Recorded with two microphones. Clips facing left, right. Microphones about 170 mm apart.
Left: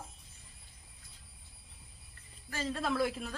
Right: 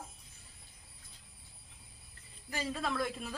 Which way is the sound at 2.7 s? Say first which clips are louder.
Left 5 dB; centre (ahead or behind).